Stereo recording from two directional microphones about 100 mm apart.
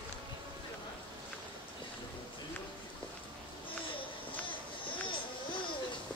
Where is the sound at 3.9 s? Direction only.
60° left (ahead or behind).